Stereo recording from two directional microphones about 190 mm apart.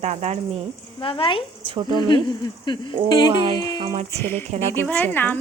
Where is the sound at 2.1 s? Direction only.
25° left (ahead or behind).